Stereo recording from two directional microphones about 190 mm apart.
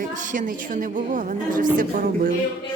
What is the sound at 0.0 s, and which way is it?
A woman's voice, 40° right (ahead or behind).